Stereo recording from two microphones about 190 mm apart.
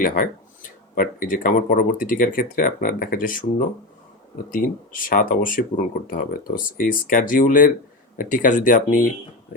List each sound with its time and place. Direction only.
0.9 s speech: 45° left (ahead or behind)
4.5 s speech: 45° left (ahead or behind)